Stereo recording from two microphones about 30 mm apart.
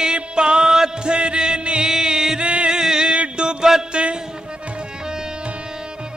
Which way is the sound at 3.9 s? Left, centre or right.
Right.